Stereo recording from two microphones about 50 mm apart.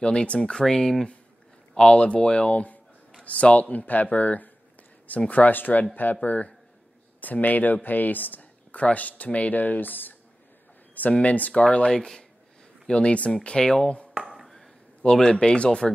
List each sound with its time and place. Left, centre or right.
0.0 s speech: left
1.8 s speech: centre; by 10.1 s left
11.0 s speech: left
14.2 s chop: right
15.1 s speech: centre